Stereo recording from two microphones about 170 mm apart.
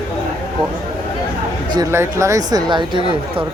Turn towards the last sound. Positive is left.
turn(degrees=-30)  # may be behind; listen again after turning